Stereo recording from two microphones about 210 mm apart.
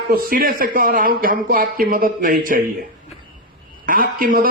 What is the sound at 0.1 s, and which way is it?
Speech, 45° right (ahead or behind).